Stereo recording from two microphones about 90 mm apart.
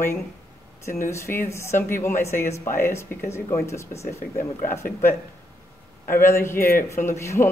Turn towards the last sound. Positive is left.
turn(degrees=30)  # may be behind; listen again after turning